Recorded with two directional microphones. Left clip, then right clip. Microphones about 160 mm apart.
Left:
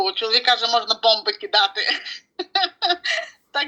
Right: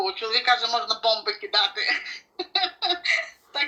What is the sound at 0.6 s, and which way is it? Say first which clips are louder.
Speech: left 5 dB; 20° left (ahead or behind).